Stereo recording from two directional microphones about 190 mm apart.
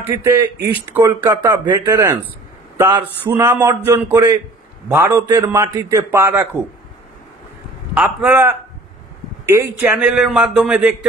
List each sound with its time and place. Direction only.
0.0 s a man's voice: 15° right (ahead or behind)
7.9 s a man's voice: 5° right (ahead or behind)